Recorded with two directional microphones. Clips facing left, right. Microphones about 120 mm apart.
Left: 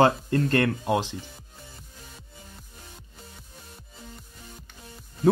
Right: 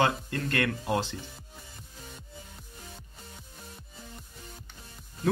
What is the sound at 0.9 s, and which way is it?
Speech, 15° left (ahead or behind).